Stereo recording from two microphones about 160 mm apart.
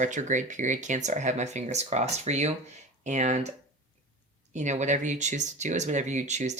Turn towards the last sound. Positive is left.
turn(degrees=-45)  # may be behind; listen again after turning